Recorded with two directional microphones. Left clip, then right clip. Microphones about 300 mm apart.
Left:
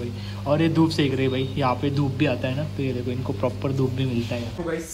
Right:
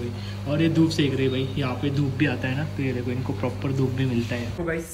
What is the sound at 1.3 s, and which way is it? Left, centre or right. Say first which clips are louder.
Speech: left 4 dB; left.